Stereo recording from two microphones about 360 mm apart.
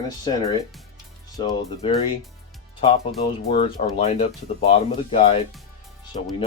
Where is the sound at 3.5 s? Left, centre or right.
Centre.